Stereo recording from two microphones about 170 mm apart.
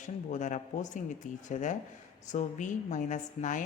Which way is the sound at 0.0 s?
45° left (ahead or behind).